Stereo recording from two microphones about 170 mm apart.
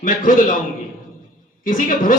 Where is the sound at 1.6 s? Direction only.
50° left (ahead or behind).